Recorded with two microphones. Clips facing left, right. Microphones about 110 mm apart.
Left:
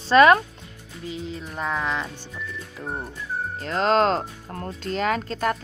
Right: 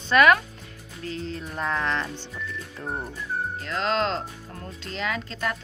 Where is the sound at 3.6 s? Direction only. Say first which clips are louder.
Left 7 dB; 40° left (ahead or behind).